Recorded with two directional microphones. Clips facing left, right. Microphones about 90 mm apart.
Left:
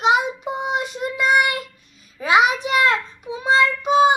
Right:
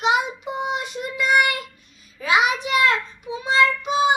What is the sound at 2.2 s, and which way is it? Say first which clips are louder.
Child singing: left 3 dB; 35° left (ahead or behind).